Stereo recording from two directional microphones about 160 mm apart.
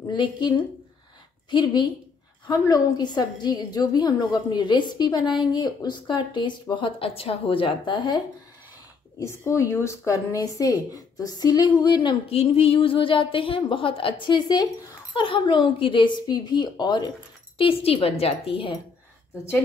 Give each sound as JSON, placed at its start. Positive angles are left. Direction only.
{"t": 0.1, "sound": "a woman's voice", "side_deg": 30}
{"t": 1.5, "sound": "a woman's voice", "side_deg": 30}
{"t": 9.2, "sound": "a woman's voice", "side_deg": 20}